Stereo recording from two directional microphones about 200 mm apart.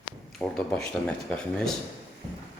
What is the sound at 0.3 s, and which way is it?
Speech, 5° left (ahead or behind).